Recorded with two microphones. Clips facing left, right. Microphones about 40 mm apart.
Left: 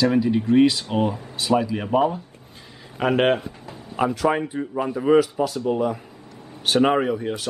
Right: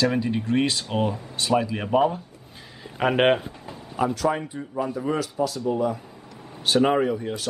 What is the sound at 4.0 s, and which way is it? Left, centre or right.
Speech, left.